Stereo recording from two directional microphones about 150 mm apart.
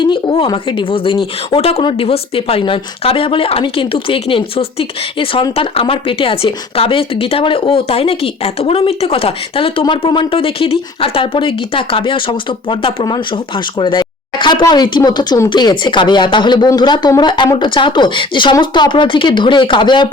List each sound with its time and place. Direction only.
0.0 s speech: 35° left (ahead or behind)